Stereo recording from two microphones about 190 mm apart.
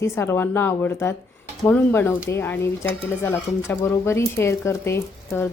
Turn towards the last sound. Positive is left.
turn(degrees=15)  # may be behind; listen again after turning